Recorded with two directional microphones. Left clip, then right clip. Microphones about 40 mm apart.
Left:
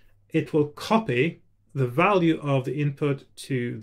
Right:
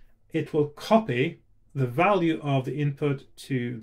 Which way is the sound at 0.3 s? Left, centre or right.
Left.